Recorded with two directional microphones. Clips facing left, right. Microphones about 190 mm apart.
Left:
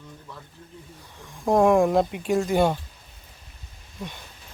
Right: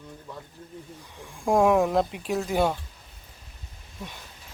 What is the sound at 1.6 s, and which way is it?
Speech, centre (ahead or behind).